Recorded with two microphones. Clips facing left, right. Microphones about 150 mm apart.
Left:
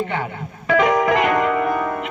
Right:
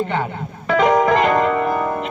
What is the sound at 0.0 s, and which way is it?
Music, 30° right (ahead or behind).